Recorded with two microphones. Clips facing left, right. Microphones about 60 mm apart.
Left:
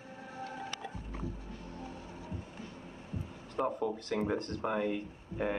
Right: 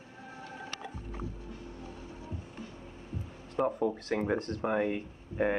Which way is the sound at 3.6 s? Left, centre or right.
Centre.